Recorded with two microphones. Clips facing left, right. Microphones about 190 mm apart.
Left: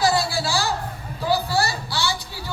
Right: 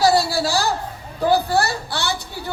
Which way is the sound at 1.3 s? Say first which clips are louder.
Right 4 dB; 55° right (ahead or behind).